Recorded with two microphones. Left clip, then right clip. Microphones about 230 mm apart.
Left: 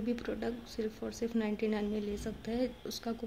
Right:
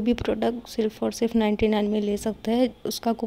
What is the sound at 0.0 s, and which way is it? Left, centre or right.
A woman's voice, right.